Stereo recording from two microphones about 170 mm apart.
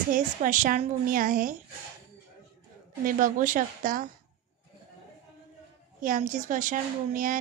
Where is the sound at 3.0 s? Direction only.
50° right (ahead or behind).